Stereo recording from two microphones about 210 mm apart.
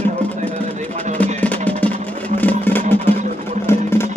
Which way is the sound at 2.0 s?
5° left (ahead or behind).